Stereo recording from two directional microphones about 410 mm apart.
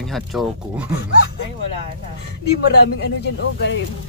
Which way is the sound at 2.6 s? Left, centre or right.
Left.